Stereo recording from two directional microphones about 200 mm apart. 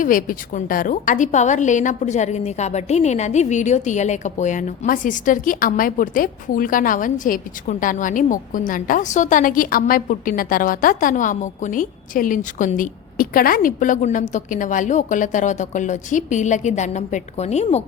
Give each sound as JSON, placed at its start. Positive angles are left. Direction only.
{"t": 0.0, "sound": "a woman's voice", "side_deg": 45}